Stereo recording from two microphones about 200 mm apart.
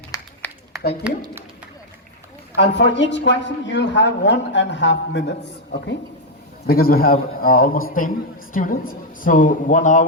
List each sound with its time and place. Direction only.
0.1 s a sound: 15° left (ahead or behind)
1.0 s a woman's voice: 5° right (ahead or behind)
2.6 s a woman's voice: 60° left (ahead or behind)
6.7 s a man's voice: 50° left (ahead or behind)